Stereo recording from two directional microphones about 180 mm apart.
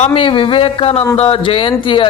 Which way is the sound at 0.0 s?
30° left (ahead or behind).